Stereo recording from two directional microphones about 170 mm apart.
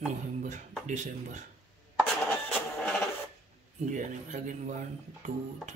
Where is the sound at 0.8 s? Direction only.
45° right (ahead or behind).